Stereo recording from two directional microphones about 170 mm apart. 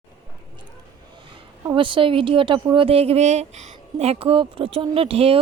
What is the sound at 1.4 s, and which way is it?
A woman's voice, 30° right (ahead or behind).